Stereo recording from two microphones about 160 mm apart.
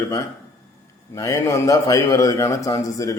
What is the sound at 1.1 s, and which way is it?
A man's voice, 20° left (ahead or behind).